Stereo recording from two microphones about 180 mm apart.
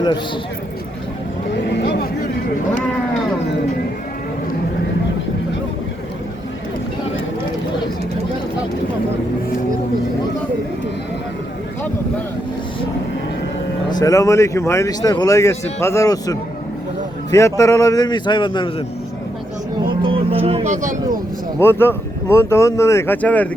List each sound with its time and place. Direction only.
1.6 s vehicle: 70° left (ahead or behind)
13.9 s a man's voice: 20° left (ahead or behind)
20.0 s music: 30° right (ahead or behind)
21.6 s speech: 10° left (ahead or behind)